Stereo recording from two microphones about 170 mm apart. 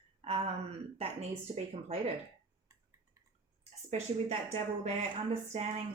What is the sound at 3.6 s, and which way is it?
Speech, 40° right (ahead or behind).